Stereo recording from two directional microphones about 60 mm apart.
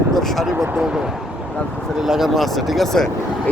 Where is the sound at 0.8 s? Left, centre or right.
Centre.